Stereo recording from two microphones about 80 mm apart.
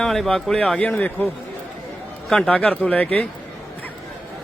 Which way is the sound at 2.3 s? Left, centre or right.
Centre.